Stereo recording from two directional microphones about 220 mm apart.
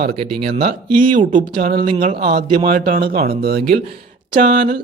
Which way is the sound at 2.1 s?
45° right (ahead or behind).